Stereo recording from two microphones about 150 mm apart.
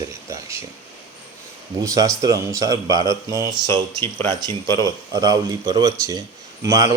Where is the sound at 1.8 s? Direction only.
25° right (ahead or behind).